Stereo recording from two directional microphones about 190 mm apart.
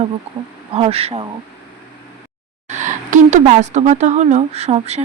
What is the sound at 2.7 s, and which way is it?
Speech, 40° right (ahead or behind).